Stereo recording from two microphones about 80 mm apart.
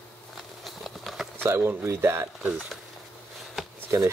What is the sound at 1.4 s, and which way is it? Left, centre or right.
Speech, right.